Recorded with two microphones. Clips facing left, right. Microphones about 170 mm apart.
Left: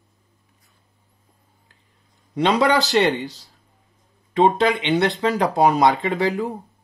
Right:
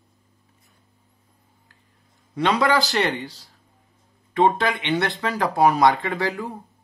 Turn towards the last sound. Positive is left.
turn(degrees=20)  # may be behind; listen again after turning